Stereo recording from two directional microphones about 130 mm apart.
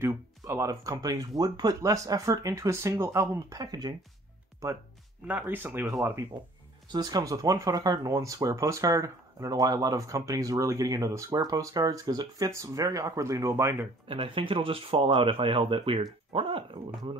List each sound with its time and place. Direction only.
0.0 s speech: 25° right (ahead or behind)
5.2 s speech: 15° right (ahead or behind)
14.0 s speech: 45° right (ahead or behind)